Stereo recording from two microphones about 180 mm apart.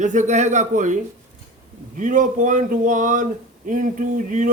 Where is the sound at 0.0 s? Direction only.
40° right (ahead or behind).